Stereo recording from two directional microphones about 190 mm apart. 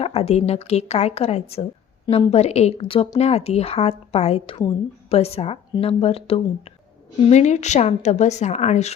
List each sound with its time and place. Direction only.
0.0 s a woman's voice: 35° left (ahead or behind)